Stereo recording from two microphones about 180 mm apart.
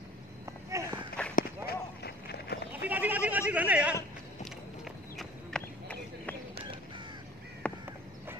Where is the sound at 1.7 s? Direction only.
65° left (ahead or behind).